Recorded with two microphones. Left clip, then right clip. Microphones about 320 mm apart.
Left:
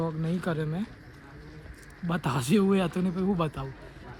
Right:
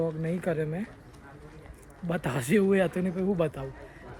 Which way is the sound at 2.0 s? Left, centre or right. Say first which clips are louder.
Even; centre.